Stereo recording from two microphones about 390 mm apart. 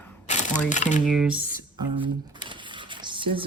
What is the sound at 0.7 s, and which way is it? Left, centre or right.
Speech, centre.